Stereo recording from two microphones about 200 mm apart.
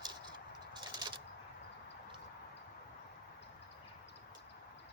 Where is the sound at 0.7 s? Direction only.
25° right (ahead or behind).